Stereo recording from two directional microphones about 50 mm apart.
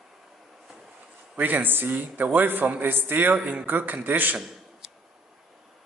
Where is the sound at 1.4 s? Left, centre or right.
Right.